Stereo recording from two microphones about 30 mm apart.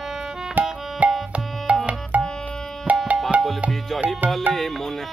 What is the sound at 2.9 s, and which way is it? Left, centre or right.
Music, right.